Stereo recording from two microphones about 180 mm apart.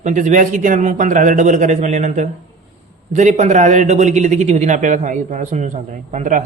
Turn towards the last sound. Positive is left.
turn(degrees=-45)  # may be behind; listen again after turning